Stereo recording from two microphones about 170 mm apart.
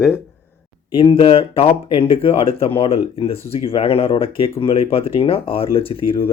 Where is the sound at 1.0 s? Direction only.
35° left (ahead or behind).